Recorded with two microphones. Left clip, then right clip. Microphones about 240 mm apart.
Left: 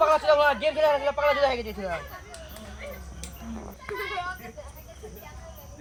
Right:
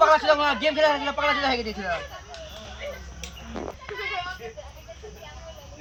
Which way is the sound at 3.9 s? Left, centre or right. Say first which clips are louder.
Even; right.